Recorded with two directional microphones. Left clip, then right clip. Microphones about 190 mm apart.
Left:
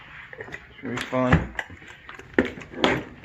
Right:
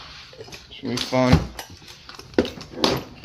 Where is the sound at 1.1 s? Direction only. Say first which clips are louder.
Right 4 dB; 30° right (ahead or behind).